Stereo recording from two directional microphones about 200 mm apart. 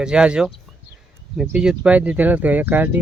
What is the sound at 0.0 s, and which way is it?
Speech, 5° right (ahead or behind).